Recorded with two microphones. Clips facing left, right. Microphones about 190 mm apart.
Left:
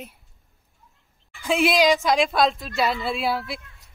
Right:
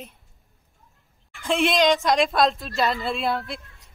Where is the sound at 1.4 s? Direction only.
5° left (ahead or behind).